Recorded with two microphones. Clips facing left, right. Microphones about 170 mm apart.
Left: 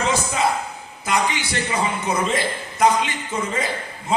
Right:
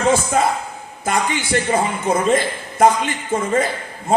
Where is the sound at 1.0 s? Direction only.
50° right (ahead or behind).